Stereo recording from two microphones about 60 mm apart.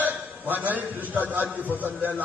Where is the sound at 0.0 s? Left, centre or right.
Right.